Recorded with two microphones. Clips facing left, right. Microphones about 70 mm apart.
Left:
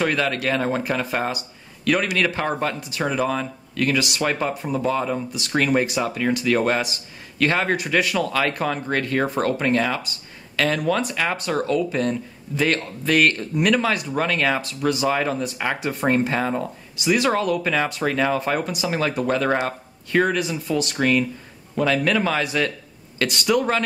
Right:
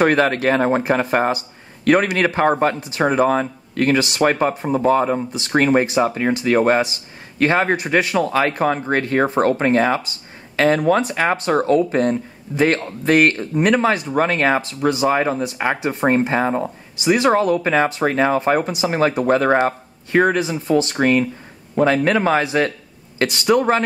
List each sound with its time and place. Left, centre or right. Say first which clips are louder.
0.0 s speech: right 6 dB; right